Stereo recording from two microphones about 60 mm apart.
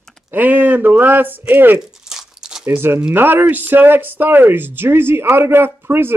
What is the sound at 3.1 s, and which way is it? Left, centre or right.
Speech, right.